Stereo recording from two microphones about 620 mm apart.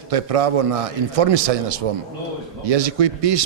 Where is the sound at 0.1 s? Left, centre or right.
Right.